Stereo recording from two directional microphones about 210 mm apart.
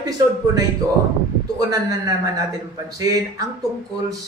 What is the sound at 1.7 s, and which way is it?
A man's voice, 15° right (ahead or behind).